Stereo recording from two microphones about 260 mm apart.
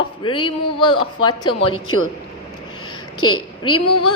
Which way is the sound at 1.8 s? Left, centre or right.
Left.